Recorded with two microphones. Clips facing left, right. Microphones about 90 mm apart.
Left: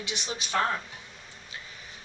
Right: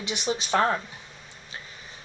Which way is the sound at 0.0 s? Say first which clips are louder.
Right 6 dB; 20° right (ahead or behind).